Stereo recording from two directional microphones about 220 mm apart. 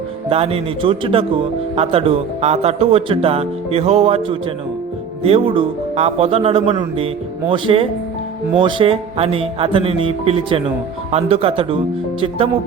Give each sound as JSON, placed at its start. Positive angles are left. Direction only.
{"t": 0.3, "sound": "speech", "side_deg": -25}